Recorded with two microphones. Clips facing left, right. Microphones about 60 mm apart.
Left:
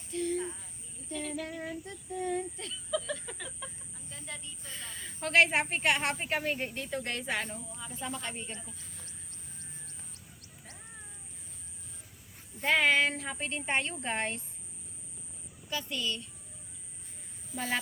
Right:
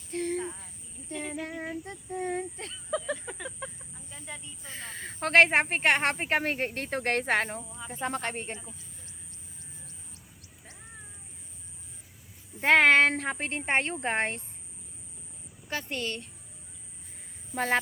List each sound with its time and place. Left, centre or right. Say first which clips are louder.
0.1 s a sound: right 1 dB; right
1.1 s child singing: right 2 dB; right
3.2 s a sound: right 4 dB; centre
3.9 s chicken: right 1 dB; centre
4.6 s speech: right 4 dB; right
7.9 s child singing: right 7 dB; right
8.1 s speech: right 6 dB; right
8.8 s a sound: left 2 dB; left
12.6 s speech: right 6 dB; right
13.3 s child singing: right 4 dB; right
15.7 s speech: right 2 dB; right
17.5 s speech: right 7 dB; right